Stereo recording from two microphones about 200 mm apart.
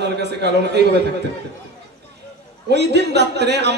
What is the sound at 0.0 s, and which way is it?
Speech, 55° right (ahead or behind).